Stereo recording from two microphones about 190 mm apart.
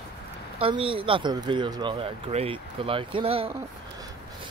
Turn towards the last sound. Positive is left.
turn(degrees=-30)  # may be behind; listen again after turning